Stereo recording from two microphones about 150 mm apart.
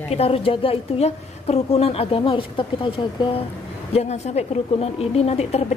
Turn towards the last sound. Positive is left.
turn(degrees=45)  # may be behind; listen again after turning